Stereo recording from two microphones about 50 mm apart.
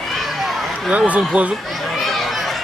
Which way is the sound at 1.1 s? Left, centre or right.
Right.